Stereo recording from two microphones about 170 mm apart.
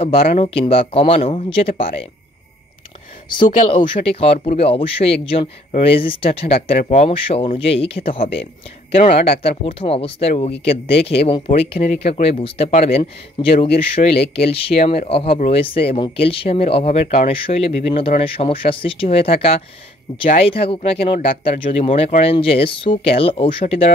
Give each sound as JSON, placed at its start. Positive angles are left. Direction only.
{"t": 0.0, "sound": "speech", "side_deg": 35}
{"t": 3.7, "sound": "speech", "side_deg": 35}